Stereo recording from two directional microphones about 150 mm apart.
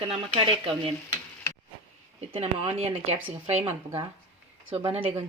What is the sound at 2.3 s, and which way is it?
Speech, 40° right (ahead or behind).